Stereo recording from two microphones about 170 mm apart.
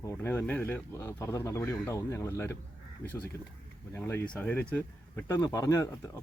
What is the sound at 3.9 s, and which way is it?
Speech, 15° left (ahead or behind).